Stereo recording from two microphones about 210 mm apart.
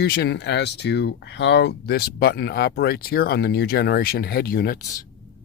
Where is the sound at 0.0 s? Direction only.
50° left (ahead or behind).